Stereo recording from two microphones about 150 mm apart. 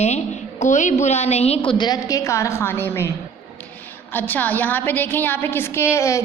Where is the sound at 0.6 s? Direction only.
55° left (ahead or behind).